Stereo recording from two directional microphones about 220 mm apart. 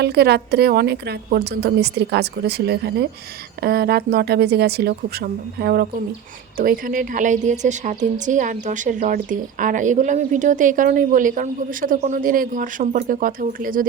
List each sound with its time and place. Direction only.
0.0 s a woman's voice: 45° right (ahead or behind)